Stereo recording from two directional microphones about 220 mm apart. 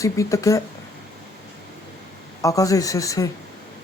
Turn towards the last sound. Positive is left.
turn(degrees=15)  # may be behind; listen again after turning